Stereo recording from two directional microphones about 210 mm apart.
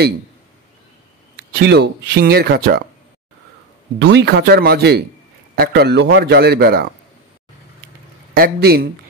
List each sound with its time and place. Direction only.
1.3 s speech: 50° right (ahead or behind)
4.0 s speech: 55° right (ahead or behind)
8.4 s speech: 50° right (ahead or behind)